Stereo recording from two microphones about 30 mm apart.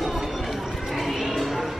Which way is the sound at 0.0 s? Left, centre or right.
Centre.